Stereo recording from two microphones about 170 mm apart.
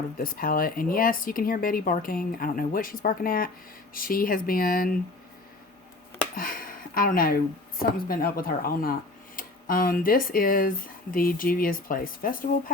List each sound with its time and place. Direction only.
0.2 s speech: 55° left (ahead or behind)
6.3 s speech: 55° left (ahead or behind)